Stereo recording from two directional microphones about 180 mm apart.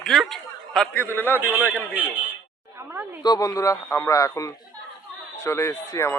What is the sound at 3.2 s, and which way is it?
Speech, 20° left (ahead or behind).